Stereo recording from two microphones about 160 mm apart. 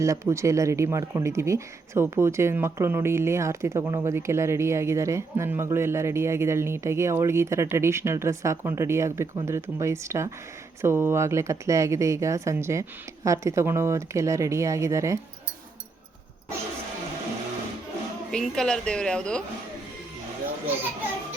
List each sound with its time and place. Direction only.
0.0 s speech: 20° right (ahead or behind)
18.3 s a woman's voice: 5° left (ahead or behind)